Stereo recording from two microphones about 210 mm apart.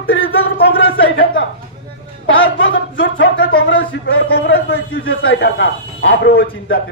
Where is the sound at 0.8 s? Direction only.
65° left (ahead or behind).